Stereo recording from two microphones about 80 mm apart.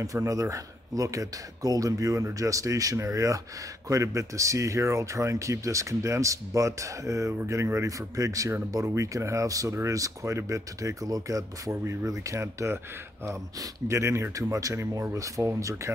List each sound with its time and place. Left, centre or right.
0.0 s speech: right
13.8 s speech: right